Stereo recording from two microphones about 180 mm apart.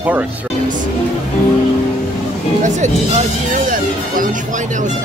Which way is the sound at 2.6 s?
45° right (ahead or behind).